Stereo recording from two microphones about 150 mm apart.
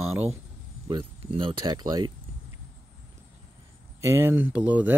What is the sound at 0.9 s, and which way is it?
Speech, 35° right (ahead or behind).